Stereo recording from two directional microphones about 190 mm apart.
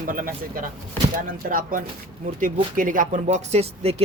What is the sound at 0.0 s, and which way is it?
Speech, 45° right (ahead or behind).